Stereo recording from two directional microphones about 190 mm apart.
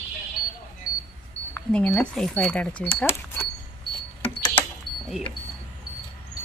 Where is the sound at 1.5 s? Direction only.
5° left (ahead or behind).